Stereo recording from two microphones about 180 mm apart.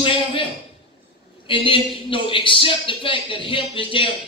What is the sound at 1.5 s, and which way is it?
A man's voice, 30° left (ahead or behind).